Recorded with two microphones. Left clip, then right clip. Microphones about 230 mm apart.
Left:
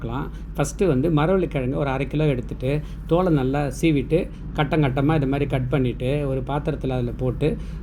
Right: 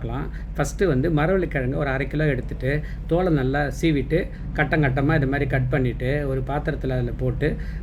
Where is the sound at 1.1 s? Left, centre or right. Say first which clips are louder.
Left 1 dB; right.